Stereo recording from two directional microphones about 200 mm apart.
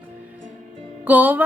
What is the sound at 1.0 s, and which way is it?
Speech, 10° right (ahead or behind).